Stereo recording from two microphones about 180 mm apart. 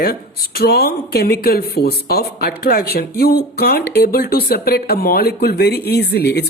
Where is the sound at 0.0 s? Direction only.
60° left (ahead or behind).